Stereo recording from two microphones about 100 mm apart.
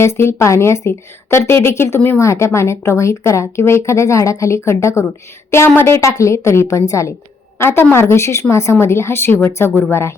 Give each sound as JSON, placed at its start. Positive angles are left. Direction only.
{"t": 0.0, "sound": "a woman's voice", "side_deg": 25}